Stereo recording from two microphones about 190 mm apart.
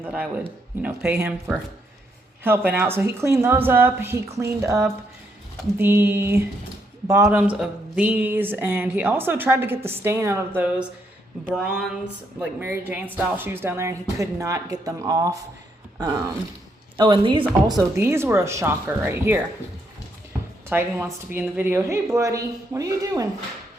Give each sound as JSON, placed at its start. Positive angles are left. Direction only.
{"t": 0.0, "sound": "speech", "side_deg": -10}
{"t": 2.4, "sound": "a woman's voice", "side_deg": -10}
{"t": 20.7, "sound": "speech", "side_deg": -10}